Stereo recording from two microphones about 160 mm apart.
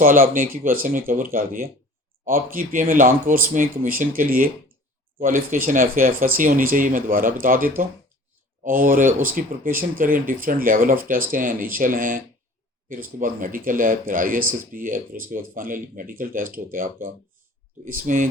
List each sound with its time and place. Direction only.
0.0 s speech: 55° right (ahead or behind)